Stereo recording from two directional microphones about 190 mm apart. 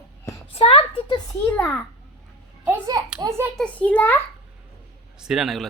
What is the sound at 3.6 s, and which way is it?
Speech, 5° left (ahead or behind).